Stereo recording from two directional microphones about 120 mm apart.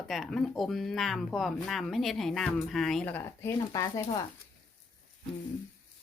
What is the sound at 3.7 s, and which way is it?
Speech, 30° left (ahead or behind).